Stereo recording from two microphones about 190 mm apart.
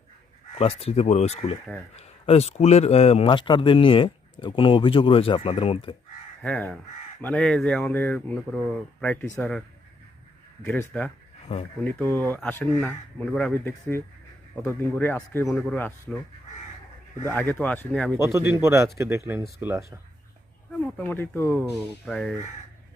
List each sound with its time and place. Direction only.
0.6 s speech: 30° left (ahead or behind)
6.4 s speech: 5° left (ahead or behind)
17.2 s speech: 10° left (ahead or behind)
18.2 s speech: 15° right (ahead or behind)
20.8 s speech: 10° left (ahead or behind)